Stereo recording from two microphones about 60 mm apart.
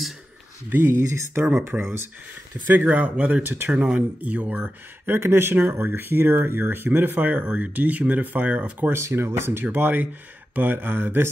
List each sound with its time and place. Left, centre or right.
1.1 s speech: right
2.6 s speech: right
3.4 s speech: right
3.7 s speech: centre
5.1 s speech: right
8.9 s speech: right